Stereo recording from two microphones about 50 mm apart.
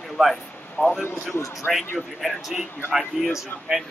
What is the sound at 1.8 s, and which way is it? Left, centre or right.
Speech, left.